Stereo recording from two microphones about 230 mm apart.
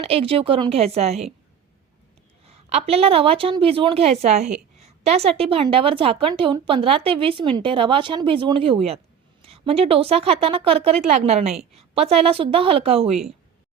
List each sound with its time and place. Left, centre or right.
0.0 s a woman's voice: right
2.4 s a woman's voice: right